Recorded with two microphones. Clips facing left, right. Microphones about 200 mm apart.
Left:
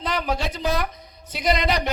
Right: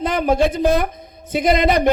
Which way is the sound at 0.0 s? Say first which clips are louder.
Right 9 dB; 50° right (ahead or behind).